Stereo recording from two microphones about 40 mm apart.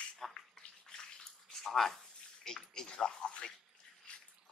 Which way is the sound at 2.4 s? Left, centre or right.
Centre.